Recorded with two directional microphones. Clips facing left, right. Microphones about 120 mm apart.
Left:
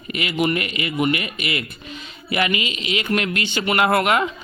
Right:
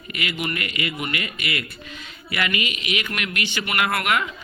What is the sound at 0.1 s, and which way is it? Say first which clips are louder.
Speech: left 7 dB; 25° left (ahead or behind).